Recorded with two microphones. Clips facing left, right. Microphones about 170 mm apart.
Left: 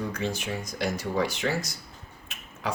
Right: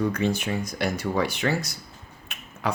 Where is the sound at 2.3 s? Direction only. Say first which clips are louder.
Right 4 dB; 60° right (ahead or behind).